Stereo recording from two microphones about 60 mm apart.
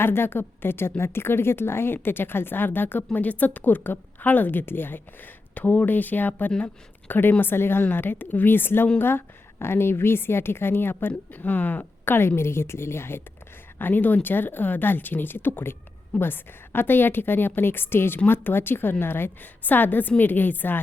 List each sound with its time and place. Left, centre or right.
0.0 s a woman's voice: left